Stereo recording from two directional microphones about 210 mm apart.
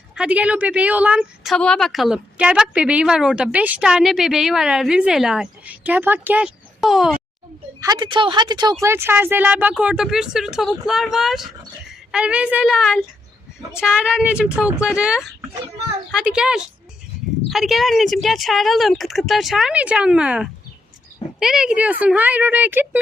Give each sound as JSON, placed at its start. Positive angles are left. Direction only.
{"t": 0.2, "sound": "a woman's voice", "side_deg": -5}
{"t": 7.8, "sound": "a woman's voice", "side_deg": -20}